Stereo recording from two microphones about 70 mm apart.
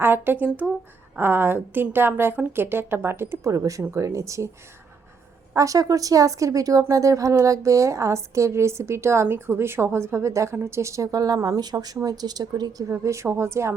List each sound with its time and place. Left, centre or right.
0.0 s a woman's voice: right
3.4 s a woman's voice: right
5.5 s a woman's voice: right
13.0 s a woman's voice: right